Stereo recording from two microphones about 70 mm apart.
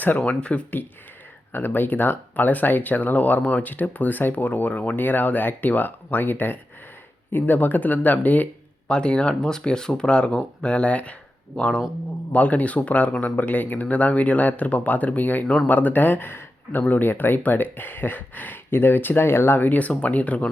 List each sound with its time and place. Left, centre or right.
0.2 s speech: centre
1.5 s speech: left
8.9 s speech: centre